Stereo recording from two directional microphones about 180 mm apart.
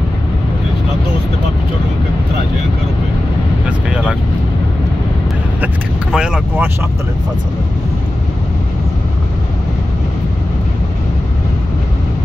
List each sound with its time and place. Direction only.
3.6 s vehicle: 5° right (ahead or behind)
6.1 s vehicle: 5° right (ahead or behind)